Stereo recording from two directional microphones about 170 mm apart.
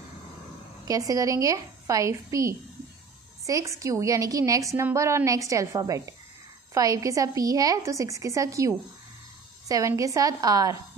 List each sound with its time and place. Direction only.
0.8 s a woman's voice: 20° right (ahead or behind)